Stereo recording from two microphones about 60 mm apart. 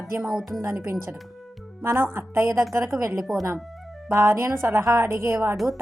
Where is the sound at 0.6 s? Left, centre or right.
Right.